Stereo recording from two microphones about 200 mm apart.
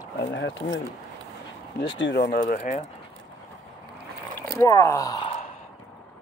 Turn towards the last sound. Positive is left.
turn(degrees=15)  # may be behind; listen again after turning